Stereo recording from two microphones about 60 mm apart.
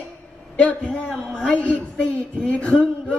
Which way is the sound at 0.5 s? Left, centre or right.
Left.